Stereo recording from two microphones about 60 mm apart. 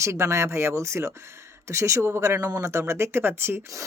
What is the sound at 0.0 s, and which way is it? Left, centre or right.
Speech, right.